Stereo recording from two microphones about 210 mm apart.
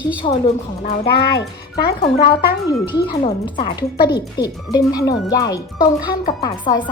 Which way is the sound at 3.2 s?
25° left (ahead or behind).